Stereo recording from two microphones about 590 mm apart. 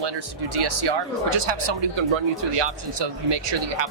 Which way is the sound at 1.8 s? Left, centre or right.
Right.